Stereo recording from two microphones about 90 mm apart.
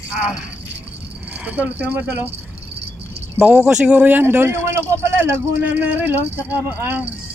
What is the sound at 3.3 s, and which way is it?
Speech, 15° right (ahead or behind).